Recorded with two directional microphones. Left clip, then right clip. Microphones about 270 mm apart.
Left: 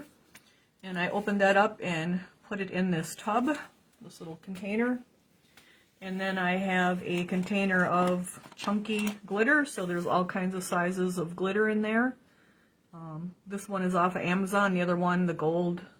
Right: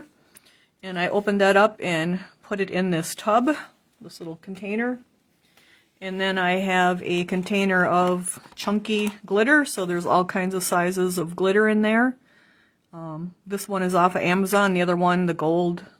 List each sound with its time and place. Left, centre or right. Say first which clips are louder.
0.8 s speech: right 7 dB; right
6.0 s speech: right 8 dB; right